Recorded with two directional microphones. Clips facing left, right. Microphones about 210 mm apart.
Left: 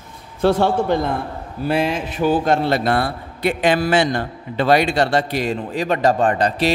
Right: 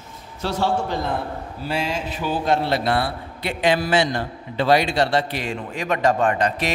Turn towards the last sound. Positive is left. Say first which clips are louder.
# left 3 dB
turn(degrees=35)  # may be behind; listen again after turning